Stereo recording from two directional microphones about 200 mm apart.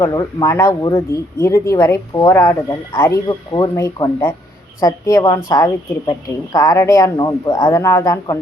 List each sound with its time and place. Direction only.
0.0 s speech: 15° left (ahead or behind)